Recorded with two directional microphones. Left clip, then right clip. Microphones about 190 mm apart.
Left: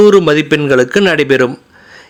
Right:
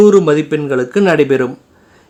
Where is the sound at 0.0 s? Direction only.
15° left (ahead or behind).